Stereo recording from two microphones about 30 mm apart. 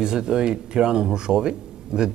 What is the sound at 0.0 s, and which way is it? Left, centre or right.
Speech, right.